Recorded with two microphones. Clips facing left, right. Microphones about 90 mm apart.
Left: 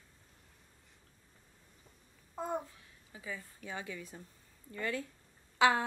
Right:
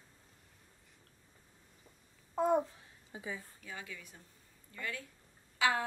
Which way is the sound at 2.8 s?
25° right (ahead or behind).